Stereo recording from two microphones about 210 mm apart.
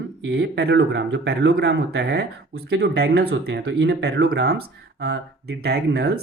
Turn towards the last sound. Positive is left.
turn(degrees=-50)  # may be behind; listen again after turning